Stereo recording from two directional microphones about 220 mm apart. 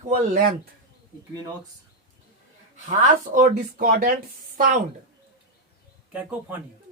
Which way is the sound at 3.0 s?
35° right (ahead or behind).